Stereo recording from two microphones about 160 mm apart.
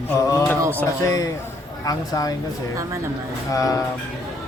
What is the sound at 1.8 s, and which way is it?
Speech, 20° left (ahead or behind).